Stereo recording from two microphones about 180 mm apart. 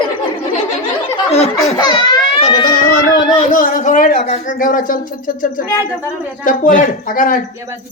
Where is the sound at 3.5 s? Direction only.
50° left (ahead or behind).